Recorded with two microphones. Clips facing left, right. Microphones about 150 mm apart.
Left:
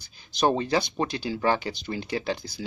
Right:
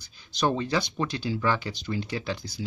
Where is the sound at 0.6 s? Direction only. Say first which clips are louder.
Left 2 dB; 45° left (ahead or behind).